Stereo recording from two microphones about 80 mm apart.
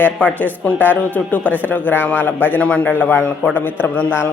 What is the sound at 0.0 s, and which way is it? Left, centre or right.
Speech, centre.